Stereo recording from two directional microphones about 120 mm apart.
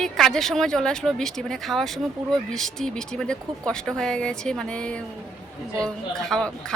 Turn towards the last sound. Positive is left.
turn(degrees=5)  # may be behind; listen again after turning